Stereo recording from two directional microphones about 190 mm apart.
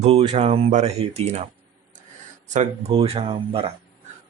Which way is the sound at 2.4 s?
40° right (ahead or behind).